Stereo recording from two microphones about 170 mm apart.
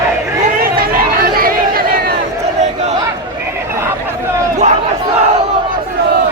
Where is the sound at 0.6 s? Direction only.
60° right (ahead or behind).